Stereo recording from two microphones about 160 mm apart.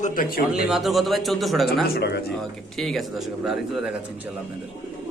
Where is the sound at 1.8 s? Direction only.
80° left.